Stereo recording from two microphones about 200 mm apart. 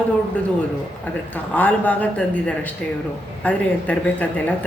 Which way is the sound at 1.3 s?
10° left (ahead or behind).